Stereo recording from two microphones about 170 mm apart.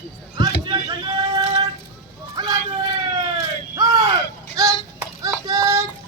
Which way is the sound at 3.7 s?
20° right (ahead or behind).